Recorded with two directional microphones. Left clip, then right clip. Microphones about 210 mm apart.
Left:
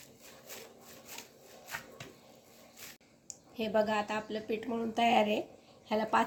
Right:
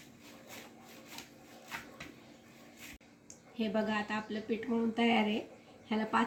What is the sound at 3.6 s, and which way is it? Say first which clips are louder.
A woman's voice: left 4 dB; 55° left (ahead or behind).